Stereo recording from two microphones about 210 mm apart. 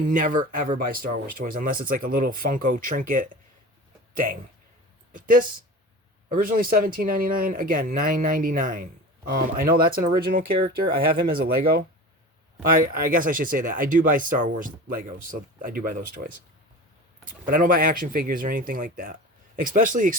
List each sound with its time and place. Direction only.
0.0 s speech: 40° right (ahead or behind)
12.9 s speech: 45° right (ahead or behind)